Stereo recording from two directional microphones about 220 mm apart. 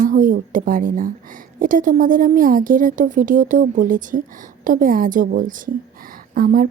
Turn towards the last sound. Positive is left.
turn(degrees=-40)  # may be behind; listen again after turning